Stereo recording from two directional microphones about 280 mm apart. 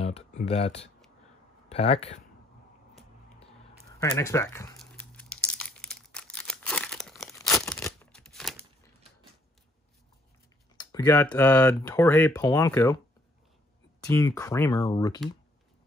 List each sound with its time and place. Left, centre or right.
0.0 s speech: left
3.9 s crumpling: centre
7.4 s a sound: centre
10.8 s speech: centre
14.0 s speech: centre